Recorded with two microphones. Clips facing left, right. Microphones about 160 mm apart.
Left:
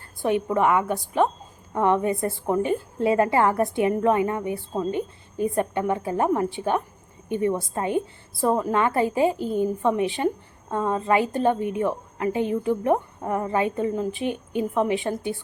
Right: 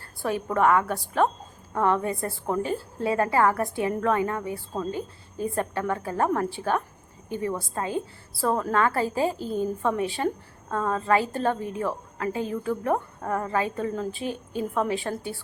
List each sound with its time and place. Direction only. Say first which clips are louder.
0.2 s a woman's voice: left 2 dB; 20° left (ahead or behind)